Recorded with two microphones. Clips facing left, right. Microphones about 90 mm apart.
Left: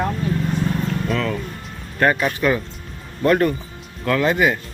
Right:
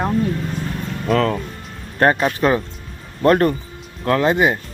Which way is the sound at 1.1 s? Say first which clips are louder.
Right 5 dB; 45° right (ahead or behind).